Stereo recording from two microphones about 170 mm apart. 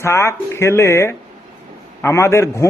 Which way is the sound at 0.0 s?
15° left (ahead or behind).